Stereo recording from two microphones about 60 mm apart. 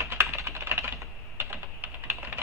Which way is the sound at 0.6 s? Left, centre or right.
Right.